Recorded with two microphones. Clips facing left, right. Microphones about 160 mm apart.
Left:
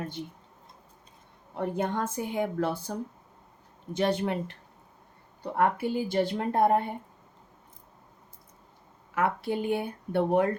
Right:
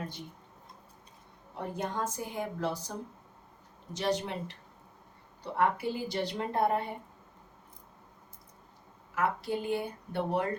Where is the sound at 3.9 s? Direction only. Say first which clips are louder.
Left 5 dB; 55° left (ahead or behind).